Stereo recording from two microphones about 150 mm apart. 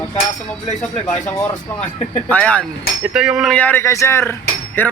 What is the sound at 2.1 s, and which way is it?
Speech, 10° left (ahead or behind).